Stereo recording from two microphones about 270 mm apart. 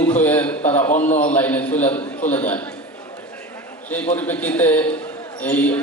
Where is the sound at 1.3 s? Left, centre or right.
Centre.